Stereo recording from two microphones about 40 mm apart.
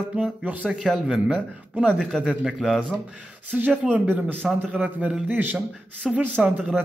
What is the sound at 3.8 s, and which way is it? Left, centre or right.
A man's voice, right.